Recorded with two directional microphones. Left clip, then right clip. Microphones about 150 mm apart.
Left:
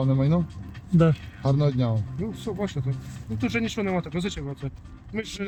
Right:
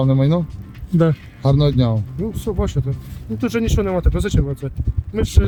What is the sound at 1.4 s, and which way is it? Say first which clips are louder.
Speech: right 7 dB; 45° right (ahead or behind).